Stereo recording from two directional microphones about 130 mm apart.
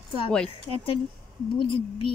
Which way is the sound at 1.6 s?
40° left (ahead or behind).